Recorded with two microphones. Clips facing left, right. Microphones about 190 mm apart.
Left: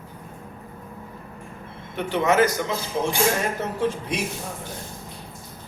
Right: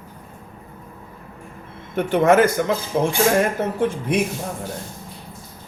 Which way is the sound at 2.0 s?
50° right (ahead or behind).